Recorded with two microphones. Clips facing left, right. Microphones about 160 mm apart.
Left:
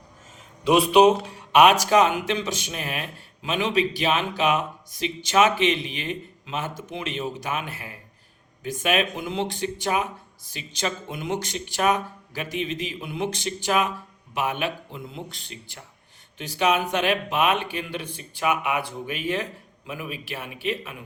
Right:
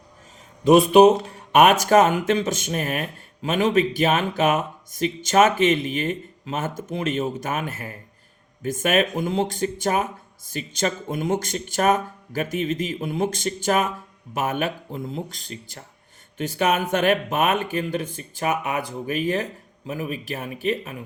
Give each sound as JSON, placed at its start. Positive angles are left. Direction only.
{"t": 0.6, "sound": "speech", "side_deg": -45}